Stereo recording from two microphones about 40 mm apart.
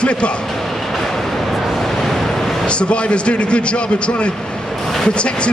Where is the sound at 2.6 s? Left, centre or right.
Left.